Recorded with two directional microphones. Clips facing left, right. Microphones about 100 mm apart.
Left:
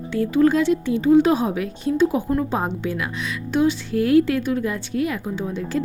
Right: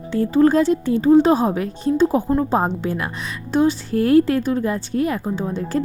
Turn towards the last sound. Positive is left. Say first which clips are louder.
# right 2 dB
turn(degrees=-40)  # may be behind; listen again after turning